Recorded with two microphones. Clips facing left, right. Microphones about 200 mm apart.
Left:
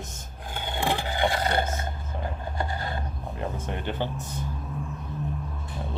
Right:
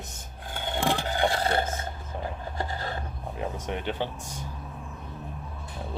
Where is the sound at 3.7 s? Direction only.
Centre (ahead or behind).